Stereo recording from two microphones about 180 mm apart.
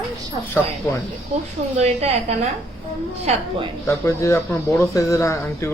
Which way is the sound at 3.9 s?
15° left (ahead or behind).